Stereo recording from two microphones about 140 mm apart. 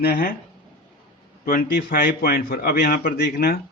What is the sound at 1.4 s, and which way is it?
A man's voice, 90° left.